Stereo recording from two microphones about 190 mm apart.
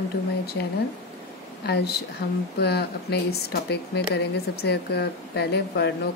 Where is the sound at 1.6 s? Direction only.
60° left (ahead or behind).